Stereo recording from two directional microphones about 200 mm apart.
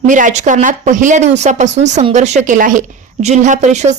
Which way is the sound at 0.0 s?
40° right (ahead or behind).